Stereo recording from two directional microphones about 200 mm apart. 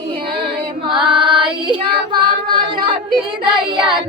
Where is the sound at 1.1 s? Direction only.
25° right (ahead or behind).